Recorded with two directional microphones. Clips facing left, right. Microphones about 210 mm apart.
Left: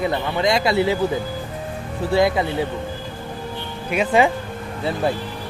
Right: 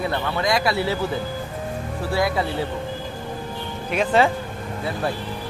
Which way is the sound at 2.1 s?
25° left (ahead or behind).